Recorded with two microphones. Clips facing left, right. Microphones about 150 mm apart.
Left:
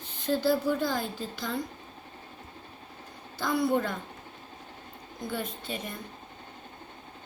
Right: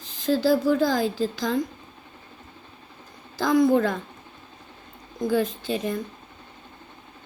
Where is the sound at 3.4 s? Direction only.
90° right.